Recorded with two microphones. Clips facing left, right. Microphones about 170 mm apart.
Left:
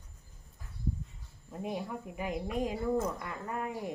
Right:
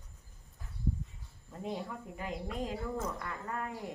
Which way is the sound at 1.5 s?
15° left (ahead or behind).